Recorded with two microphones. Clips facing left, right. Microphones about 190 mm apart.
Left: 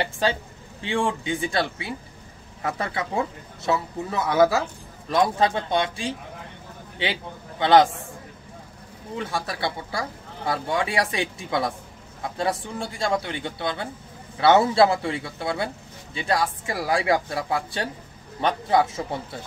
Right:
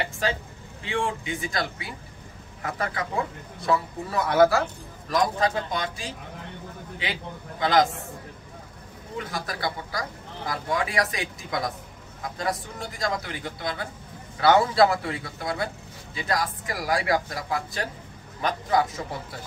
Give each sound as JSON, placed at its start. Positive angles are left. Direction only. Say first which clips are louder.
{"t": 0.0, "sound": "a man's voice", "louder": "left 3 dB", "side_deg": 30}
{"t": 9.2, "sound": "speech", "louder": "left 3 dB", "side_deg": 30}